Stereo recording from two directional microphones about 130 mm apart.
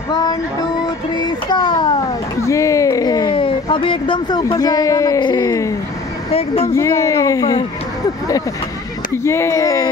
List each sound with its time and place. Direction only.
0.1 s speech: 30° left (ahead or behind)
1.1 s child singing: 35° left (ahead or behind)
2.4 s a sound: 25° left (ahead or behind)
6.3 s speech: 50° left (ahead or behind)
6.7 s speech: 20° left (ahead or behind)
9.2 s speech: 20° left (ahead or behind)